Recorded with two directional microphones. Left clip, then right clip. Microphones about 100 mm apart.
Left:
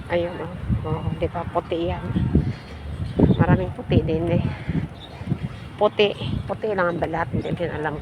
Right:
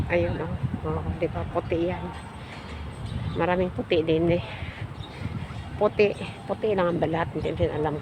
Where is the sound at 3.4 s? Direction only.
65° right (ahead or behind).